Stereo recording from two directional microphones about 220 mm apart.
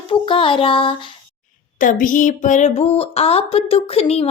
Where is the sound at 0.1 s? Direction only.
25° left (ahead or behind).